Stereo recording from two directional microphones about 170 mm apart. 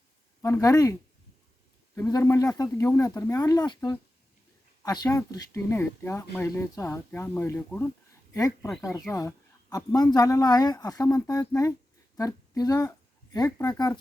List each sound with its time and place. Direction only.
0.4 s speech: 20° left (ahead or behind)
2.0 s speech: 20° left (ahead or behind)
5.0 s speech: 15° left (ahead or behind)